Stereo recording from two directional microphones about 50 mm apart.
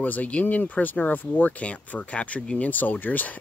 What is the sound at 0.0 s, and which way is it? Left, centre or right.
Speech, left.